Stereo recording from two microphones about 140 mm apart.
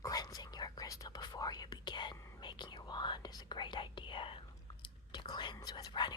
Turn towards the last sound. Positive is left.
turn(degrees=30)  # may be behind; listen again after turning